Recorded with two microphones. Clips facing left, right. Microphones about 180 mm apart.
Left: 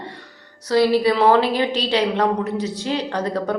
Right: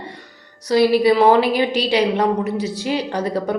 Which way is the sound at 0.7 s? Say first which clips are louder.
Right 2 dB; 10° right (ahead or behind).